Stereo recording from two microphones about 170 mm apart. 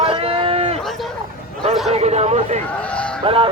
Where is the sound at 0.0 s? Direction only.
35° right (ahead or behind).